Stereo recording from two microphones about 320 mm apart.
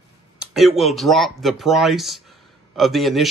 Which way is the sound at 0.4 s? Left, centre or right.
Centre.